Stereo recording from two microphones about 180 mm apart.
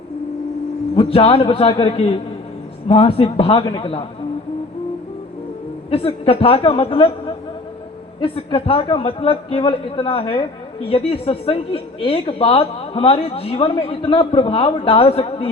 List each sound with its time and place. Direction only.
0.9 s a man's voice: 30° left (ahead or behind)
5.9 s a man's voice: 30° left (ahead or behind)